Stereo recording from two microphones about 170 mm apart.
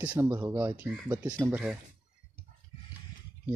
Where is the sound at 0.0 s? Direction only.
10° right (ahead or behind).